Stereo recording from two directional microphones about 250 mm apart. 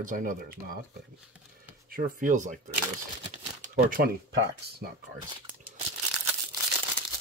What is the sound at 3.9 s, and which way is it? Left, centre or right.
Speech, right.